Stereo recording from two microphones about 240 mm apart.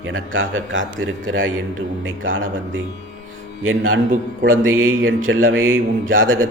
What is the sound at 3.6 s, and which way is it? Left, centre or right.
A man's voice, right.